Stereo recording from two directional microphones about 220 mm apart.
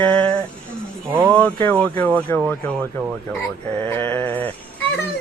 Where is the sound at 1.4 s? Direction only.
5° left (ahead or behind).